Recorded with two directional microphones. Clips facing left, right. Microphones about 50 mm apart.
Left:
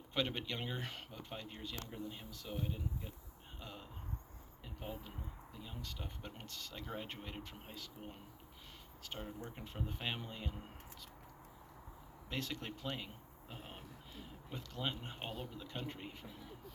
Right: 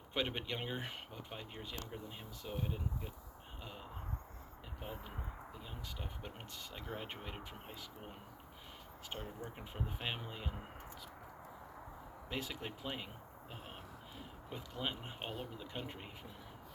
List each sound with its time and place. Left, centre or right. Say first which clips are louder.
0.1 s speech: even; centre
4.8 s speech: left 1 dB; centre
5.5 s speech: left 4 dB; centre
9.4 s speech: right 1 dB; centre
12.3 s speech: even; centre
14.2 s speech: even; centre